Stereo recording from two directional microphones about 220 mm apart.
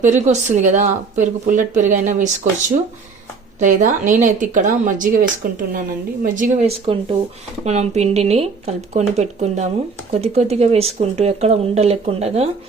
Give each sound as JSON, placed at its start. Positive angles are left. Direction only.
{"t": 0.0, "sound": "a woman's voice", "side_deg": -30}
{"t": 3.6, "sound": "a woman's voice", "side_deg": -35}
{"t": 6.2, "sound": "a woman's voice", "side_deg": -35}